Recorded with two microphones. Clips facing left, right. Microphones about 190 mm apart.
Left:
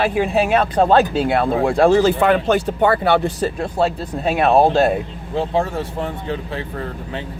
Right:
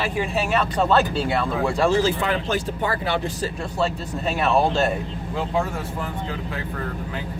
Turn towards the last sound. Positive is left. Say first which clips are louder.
# left 4 dB
turn(degrees=30)  # may be behind; listen again after turning